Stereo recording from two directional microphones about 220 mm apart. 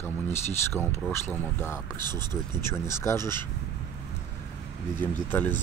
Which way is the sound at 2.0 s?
20° right (ahead or behind).